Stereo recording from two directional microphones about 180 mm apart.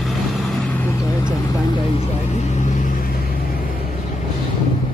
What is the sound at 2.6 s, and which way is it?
Vehicle, 45° left (ahead or behind).